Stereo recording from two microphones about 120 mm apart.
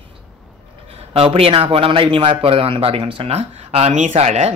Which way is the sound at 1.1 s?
50° right (ahead or behind).